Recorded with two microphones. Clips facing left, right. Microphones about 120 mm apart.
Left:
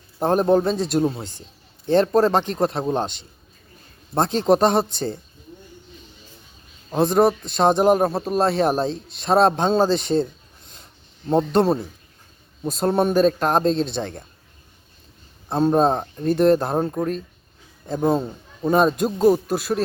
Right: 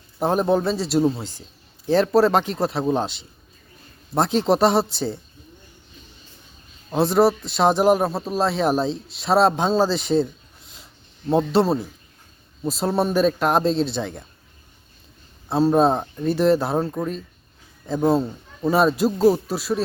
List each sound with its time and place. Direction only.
0.2 s a man's voice: 5° right (ahead or behind)
2.1 s speech: 40° left (ahead or behind)
2.6 s a man's voice: 5° right (ahead or behind)
6.9 s a man's voice: 5° right (ahead or behind)
11.3 s a man's voice: 5° right (ahead or behind)
15.4 s a man's voice: 5° right (ahead or behind)
16.7 s speech: 20° left (ahead or behind)
18.0 s a man's voice: centre (ahead or behind)